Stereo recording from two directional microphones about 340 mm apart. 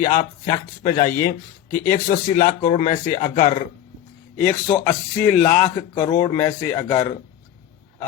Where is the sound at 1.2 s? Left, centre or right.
Left.